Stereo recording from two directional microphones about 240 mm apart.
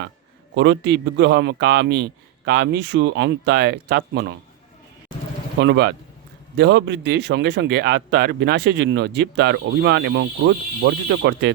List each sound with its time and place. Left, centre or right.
0.5 s speech: right
5.5 s speech: right